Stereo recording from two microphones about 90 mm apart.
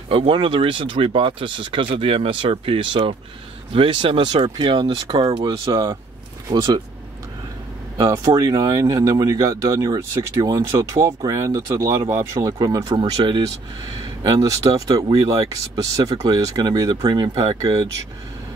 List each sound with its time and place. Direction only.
0.1 s speech: 70° right (ahead or behind)
3.7 s speech: 65° right (ahead or behind); by 5.9 s 50° right (ahead or behind)
8.0 s speech: 35° right (ahead or behind)
8.3 s speech: 50° right (ahead or behind)
14.2 s speech: 45° right (ahead or behind); by 17.6 s 65° right (ahead or behind)